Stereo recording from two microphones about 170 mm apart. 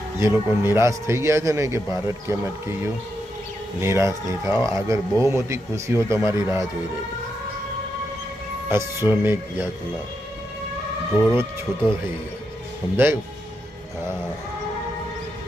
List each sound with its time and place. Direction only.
0.2 s speech: 15° right (ahead or behind)
8.7 s speech: 15° right (ahead or behind)
11.1 s speech: 10° right (ahead or behind)